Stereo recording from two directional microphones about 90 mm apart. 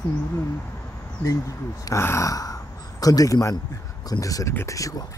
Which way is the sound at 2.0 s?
35° left (ahead or behind).